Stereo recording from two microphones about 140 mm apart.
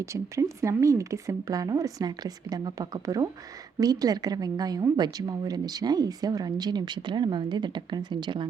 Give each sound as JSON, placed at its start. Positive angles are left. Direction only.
{"t": 0.0, "sound": "a woman's voice", "side_deg": -20}